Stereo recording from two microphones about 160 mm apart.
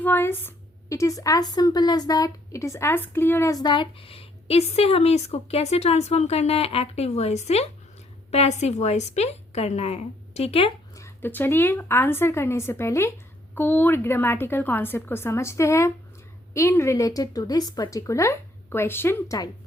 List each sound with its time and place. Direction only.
0.0 s a woman's voice: 15° left (ahead or behind); by 10.7 s 40° left (ahead or behind)
10.9 s a woman's voice: 15° left (ahead or behind)